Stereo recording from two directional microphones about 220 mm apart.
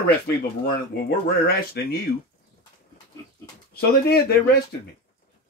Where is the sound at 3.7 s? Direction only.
45° left (ahead or behind).